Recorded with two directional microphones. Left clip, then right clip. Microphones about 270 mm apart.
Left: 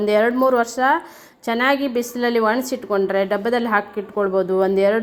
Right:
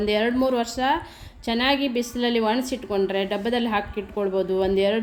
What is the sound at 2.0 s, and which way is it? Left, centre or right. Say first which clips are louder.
Speech: left 4 dB; centre.